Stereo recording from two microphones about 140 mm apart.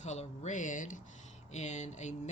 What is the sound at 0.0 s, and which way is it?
Speech, 55° left (ahead or behind).